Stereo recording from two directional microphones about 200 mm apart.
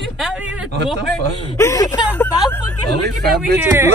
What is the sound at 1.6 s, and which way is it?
Speech, 15° left (ahead or behind).